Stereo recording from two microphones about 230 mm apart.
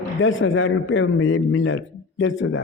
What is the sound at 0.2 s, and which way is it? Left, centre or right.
A man's voice, left.